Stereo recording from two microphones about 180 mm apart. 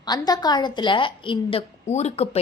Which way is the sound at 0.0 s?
20° left (ahead or behind).